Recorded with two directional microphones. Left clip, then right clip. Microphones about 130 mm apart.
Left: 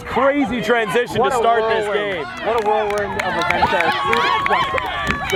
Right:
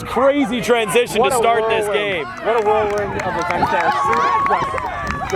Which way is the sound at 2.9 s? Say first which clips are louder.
Even; 60° left (ahead or behind).